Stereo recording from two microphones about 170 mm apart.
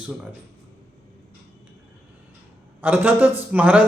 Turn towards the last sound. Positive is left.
turn(degrees=-10)  # may be behind; listen again after turning